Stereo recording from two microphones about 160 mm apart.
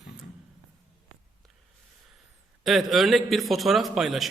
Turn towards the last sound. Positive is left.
turn(degrees=0)  # may be behind; listen again after turning